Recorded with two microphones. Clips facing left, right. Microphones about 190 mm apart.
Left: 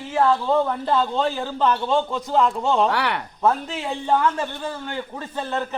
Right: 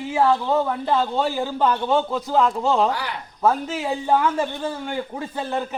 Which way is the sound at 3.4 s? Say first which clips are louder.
Right 2 dB; 5° right (ahead or behind).